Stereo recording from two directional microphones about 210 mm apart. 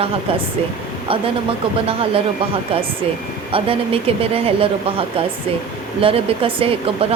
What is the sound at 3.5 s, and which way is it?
Speech, 25° right (ahead or behind).